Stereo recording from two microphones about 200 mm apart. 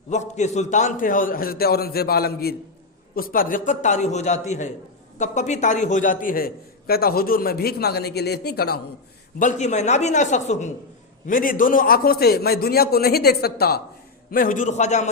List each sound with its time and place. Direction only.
0.1 s a man's voice: 35° left (ahead or behind); by 8.8 s 55° left (ahead or behind)
9.4 s a man's voice: 35° left (ahead or behind)